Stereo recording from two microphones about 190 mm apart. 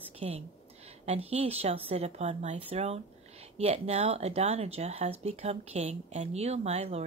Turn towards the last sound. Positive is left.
turn(degrees=-35)  # may be behind; listen again after turning